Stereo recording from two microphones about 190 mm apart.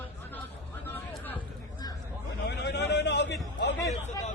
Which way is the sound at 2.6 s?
60° left (ahead or behind).